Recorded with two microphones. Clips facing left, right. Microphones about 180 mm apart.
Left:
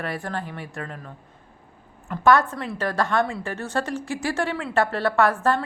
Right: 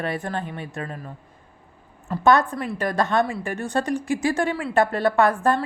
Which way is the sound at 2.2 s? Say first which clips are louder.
Even; 20° right (ahead or behind).